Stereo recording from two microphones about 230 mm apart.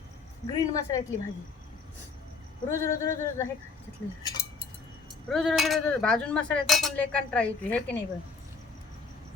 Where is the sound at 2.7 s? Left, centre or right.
Centre.